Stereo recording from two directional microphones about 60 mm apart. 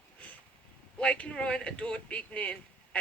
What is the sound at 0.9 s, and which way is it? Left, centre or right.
Speech, left.